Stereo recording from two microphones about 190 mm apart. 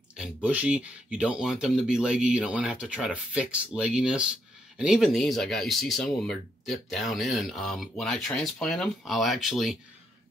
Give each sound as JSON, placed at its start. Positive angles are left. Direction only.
{"t": 0.1, "sound": "speech", "side_deg": -5}